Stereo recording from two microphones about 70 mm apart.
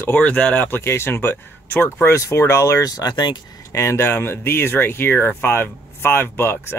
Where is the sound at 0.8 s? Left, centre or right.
Left.